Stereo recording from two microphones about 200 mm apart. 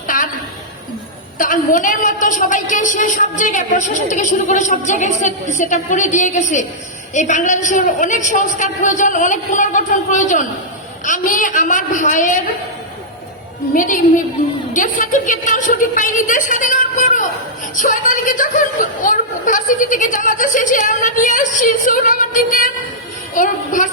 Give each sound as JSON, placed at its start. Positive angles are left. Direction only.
{"t": 0.1, "sound": "a sound", "side_deg": 40}
{"t": 1.4, "sound": "a woman's voice", "side_deg": 40}
{"t": 13.7, "sound": "a woman's voice", "side_deg": 40}